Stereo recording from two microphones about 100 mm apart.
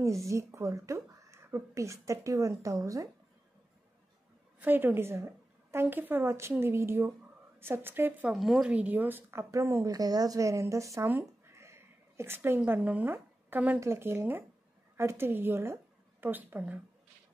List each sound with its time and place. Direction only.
0.0 s speech: 30° right (ahead or behind)
4.6 s a woman's voice: 20° right (ahead or behind)
8.3 s speech: 5° right (ahead or behind); by 9.8 s 25° right (ahead or behind)
9.8 s speech: 40° right (ahead or behind)
11.1 s a sound: 25° right (ahead or behind)
13.7 s a woman's voice: 25° right (ahead or behind)